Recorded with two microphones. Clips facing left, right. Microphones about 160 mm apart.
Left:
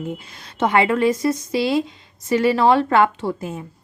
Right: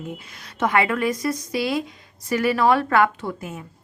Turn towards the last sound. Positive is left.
turn(degrees=30)  # may be behind; listen again after turning